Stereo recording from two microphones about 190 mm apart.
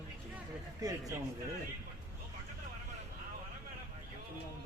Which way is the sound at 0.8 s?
20° right (ahead or behind).